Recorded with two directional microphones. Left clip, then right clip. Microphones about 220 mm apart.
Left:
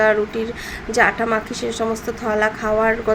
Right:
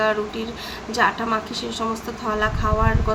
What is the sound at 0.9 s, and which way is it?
A woman's voice, 15° left (ahead or behind).